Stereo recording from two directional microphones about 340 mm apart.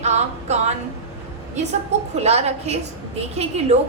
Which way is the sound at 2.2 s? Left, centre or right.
Centre.